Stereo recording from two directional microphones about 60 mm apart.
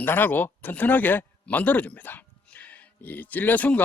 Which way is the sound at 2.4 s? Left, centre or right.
Left.